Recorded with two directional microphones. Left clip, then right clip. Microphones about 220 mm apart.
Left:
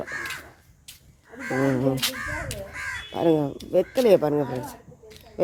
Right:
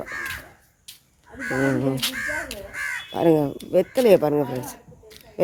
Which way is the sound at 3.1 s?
15° right (ahead or behind).